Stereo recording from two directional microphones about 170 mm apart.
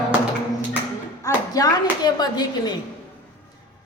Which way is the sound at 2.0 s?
25° left (ahead or behind).